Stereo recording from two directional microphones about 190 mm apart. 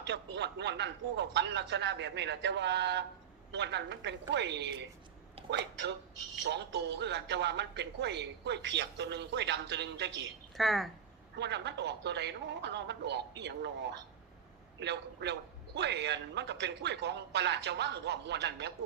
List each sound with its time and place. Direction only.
0.0 s speech: 65° right (ahead or behind)
10.6 s speech: centre (ahead or behind)
11.3 s speech: 65° right (ahead or behind)
14.8 s speech: 65° right (ahead or behind)